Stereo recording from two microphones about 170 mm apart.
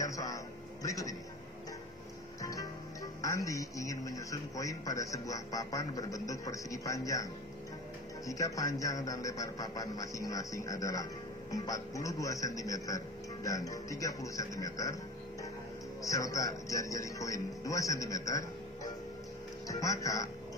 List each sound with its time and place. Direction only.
0.0 s a sound: 20° left (ahead or behind)
0.8 s a man's voice: 20° left (ahead or behind)
2.4 s music: 20° left (ahead or behind)
3.2 s a man's voice: 20° left (ahead or behind)
8.3 s a man's voice: 20° left (ahead or behind)
16.0 s a man's voice: 20° left (ahead or behind)
19.7 s a man's voice: 20° left (ahead or behind)